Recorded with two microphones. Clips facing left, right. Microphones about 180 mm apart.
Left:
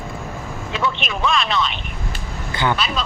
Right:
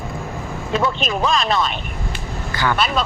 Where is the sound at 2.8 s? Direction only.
50° right (ahead or behind).